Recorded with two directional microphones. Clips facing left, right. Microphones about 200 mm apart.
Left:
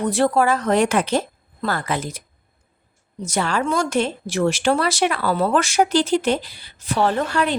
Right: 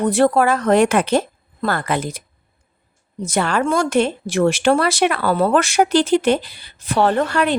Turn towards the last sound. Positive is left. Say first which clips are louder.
# right 3 dB
turn(degrees=-60)  # may be behind; listen again after turning